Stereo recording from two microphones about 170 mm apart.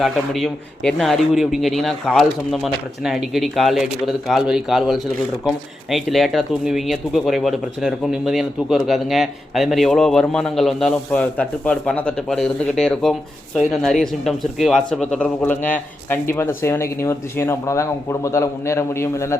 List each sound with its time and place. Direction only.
0.0 s speech: centre (ahead or behind); by 19.4 s 15° left (ahead or behind)